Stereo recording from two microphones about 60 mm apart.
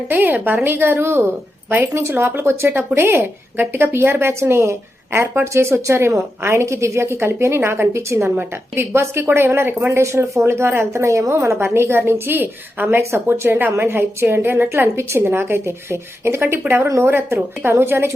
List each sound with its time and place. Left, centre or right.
0.1 s a woman's voice: right
10.0 s speech: right
11.4 s a woman's voice: right